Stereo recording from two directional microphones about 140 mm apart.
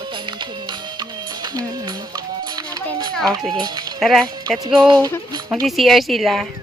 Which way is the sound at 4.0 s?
Centre (ahead or behind).